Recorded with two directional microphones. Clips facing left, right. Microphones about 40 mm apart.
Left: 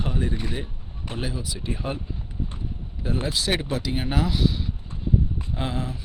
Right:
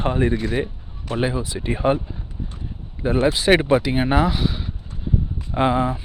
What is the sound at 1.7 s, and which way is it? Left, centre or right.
Speech, right.